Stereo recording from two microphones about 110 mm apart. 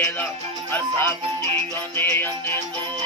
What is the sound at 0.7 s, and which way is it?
Music, 20° left (ahead or behind).